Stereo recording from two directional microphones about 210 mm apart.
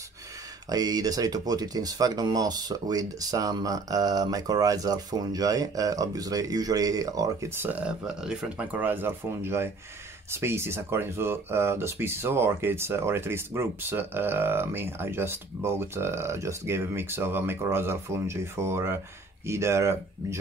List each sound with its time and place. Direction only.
0.7 s speech: 20° right (ahead or behind)